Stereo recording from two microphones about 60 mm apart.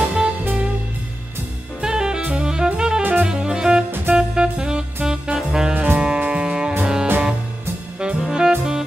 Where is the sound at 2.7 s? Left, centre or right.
Centre.